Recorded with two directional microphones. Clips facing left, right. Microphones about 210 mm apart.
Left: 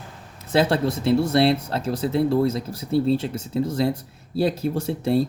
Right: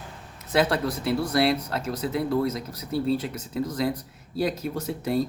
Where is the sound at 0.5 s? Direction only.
30° left (ahead or behind).